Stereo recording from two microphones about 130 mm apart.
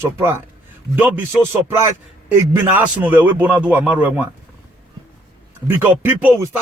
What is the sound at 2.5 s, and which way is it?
A man's voice, 15° right (ahead or behind).